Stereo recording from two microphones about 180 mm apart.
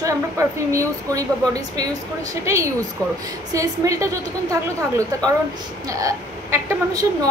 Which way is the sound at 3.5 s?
20° right (ahead or behind).